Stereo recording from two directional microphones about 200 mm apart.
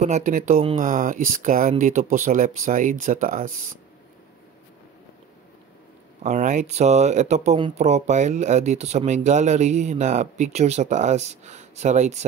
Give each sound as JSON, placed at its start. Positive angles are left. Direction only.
{"t": 0.0, "sound": "speech", "side_deg": -40}
{"t": 6.2, "sound": "speech", "side_deg": -35}